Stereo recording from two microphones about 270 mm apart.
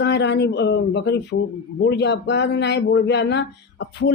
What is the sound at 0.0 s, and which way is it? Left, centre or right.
Speech, left.